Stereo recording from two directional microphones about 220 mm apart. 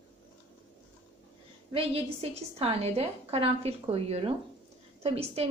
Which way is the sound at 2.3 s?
30° right (ahead or behind).